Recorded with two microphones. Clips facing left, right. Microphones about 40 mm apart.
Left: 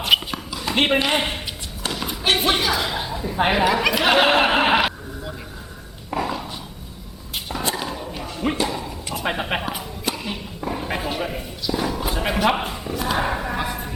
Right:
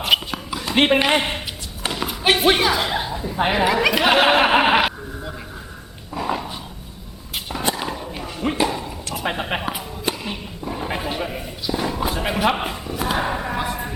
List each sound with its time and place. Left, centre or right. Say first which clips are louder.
0.0 s a sound: even; centre
1.0 s a man's voice: right 2 dB; centre
6.1 s dog: left 3 dB; left
7.8 s dog: right 1 dB; centre
8.5 s horse: right 3 dB; centre
9.1 s a sound: even; centre